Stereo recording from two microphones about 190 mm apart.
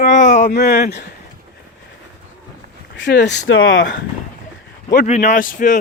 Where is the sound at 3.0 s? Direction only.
65° left (ahead or behind); by 3.9 s 80° left.